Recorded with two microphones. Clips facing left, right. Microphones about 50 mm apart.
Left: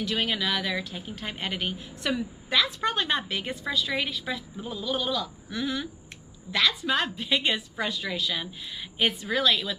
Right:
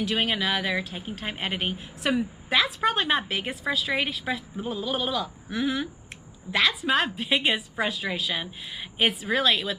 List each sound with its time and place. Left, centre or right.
0.1 s speech: right